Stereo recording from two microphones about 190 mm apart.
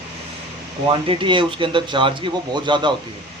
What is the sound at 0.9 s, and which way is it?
A man's voice, 25° right (ahead or behind).